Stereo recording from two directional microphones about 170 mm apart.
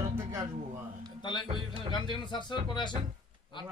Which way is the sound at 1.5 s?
30° right (ahead or behind).